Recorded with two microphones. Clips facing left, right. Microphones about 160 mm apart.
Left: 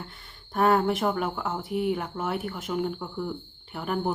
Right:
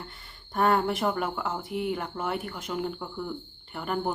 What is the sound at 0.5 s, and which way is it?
Speech, centre (ahead or behind).